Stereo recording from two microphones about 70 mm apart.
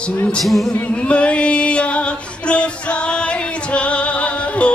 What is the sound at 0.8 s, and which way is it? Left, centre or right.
Music, centre.